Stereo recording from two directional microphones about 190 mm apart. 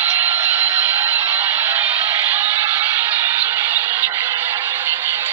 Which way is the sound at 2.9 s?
15° right (ahead or behind).